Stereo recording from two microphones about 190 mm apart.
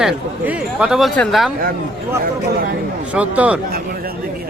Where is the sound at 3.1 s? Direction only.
5° right (ahead or behind).